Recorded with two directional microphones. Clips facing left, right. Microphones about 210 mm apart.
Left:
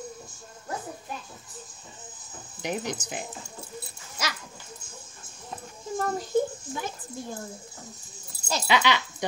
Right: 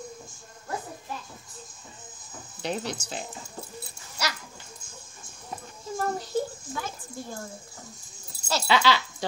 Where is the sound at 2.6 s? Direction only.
15° left (ahead or behind).